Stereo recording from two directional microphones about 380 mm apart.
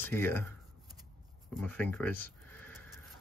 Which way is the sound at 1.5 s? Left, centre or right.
Centre.